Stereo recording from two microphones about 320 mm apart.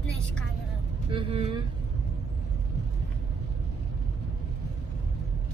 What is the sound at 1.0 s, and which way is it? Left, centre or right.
Speech, centre.